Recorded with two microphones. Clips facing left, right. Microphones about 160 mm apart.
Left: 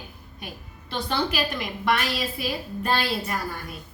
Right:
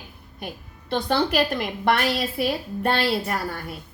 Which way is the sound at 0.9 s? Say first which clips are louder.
Right 5 dB; 60° right (ahead or behind).